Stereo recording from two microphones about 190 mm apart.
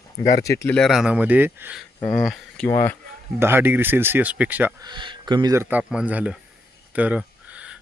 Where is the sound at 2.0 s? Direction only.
5° left (ahead or behind).